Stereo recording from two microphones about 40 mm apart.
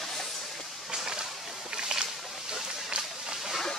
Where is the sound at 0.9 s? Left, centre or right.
Centre.